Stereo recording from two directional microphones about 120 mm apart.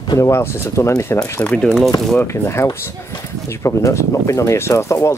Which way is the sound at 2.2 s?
20° left (ahead or behind).